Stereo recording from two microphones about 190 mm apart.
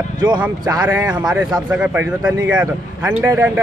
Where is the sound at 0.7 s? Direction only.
15° right (ahead or behind).